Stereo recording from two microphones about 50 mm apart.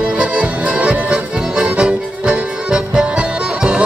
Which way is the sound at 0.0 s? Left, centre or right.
Right.